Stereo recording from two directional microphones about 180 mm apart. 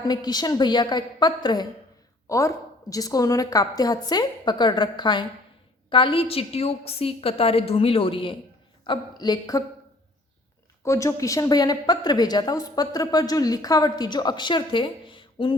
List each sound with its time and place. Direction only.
0.0 s a woman's voice: 20° left (ahead or behind)
10.8 s a woman's voice: 15° left (ahead or behind)